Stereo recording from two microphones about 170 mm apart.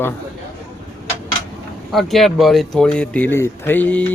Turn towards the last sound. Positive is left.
turn(degrees=10)  # may be behind; listen again after turning